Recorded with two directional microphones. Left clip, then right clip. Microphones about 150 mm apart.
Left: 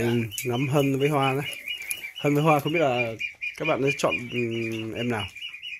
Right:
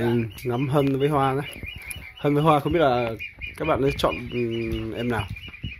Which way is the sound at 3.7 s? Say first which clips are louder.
Right 1 dB; centre (ahead or behind).